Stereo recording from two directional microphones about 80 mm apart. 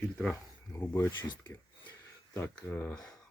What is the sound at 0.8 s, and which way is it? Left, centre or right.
Speech, left.